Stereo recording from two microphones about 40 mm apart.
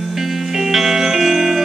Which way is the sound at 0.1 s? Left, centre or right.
Centre.